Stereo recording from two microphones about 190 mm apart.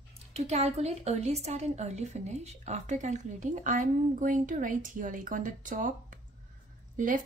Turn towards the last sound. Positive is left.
turn(degrees=-45)  # may be behind; listen again after turning